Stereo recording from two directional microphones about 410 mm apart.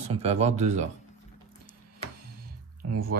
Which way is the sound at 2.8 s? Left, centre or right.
Right.